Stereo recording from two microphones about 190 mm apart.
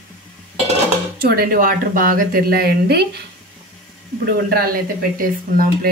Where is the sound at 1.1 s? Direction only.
50° right (ahead or behind).